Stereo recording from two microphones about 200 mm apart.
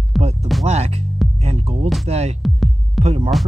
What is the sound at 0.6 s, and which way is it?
Speech, 30° right (ahead or behind).